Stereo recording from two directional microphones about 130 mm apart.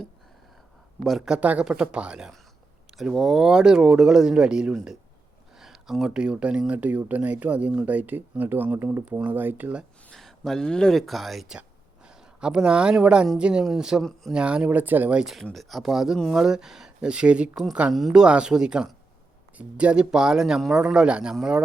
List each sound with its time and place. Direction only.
0.9 s speech: centre (ahead or behind)
10.1 s speech: 5° left (ahead or behind)